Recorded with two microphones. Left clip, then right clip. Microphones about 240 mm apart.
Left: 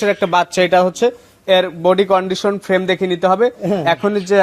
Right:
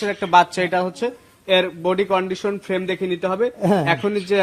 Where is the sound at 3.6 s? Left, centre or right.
Right.